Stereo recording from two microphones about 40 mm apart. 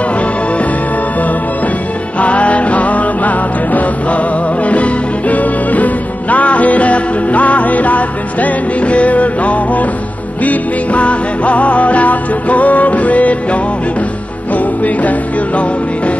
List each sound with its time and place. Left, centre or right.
2.1 s music: left